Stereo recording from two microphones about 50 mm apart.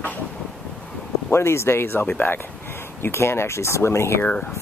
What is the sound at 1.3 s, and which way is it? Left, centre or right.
Speech, left.